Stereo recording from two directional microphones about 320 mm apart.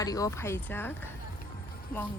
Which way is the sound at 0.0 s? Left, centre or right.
Centre.